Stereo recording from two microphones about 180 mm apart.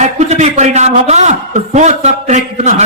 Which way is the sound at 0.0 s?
40° right (ahead or behind).